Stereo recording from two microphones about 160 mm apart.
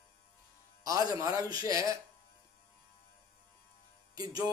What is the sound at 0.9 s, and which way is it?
A man's voice, 20° right (ahead or behind).